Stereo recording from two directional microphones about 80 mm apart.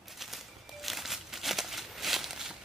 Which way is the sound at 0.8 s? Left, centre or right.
Centre.